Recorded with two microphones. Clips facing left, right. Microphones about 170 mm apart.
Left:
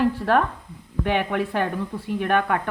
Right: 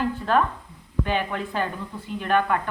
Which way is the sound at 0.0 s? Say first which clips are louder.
Left 2 dB; 65° left (ahead or behind).